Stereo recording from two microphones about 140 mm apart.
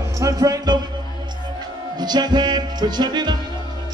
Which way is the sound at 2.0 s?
30° right (ahead or behind).